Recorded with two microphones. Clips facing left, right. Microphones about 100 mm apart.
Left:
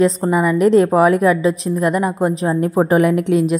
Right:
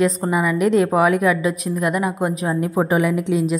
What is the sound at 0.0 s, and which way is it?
A woman's voice, 30° left (ahead or behind).